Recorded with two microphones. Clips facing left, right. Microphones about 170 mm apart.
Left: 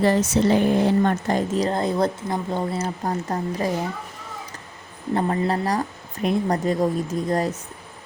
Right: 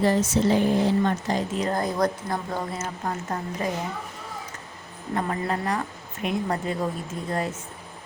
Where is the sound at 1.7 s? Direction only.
25° left (ahead or behind).